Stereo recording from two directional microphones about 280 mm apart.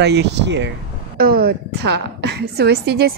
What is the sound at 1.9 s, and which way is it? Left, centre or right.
Speech, right.